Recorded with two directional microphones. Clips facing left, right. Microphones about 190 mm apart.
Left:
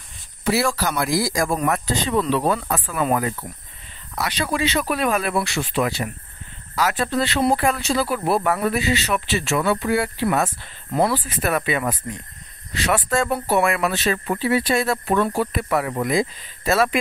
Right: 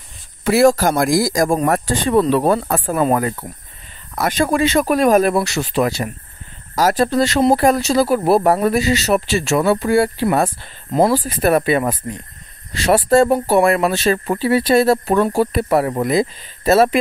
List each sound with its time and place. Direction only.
0.4 s speech: 50° right (ahead or behind); by 17.0 s 25° right (ahead or behind)